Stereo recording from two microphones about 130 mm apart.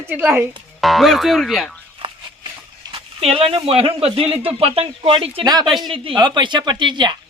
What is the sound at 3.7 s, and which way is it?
Speech, 45° right (ahead or behind).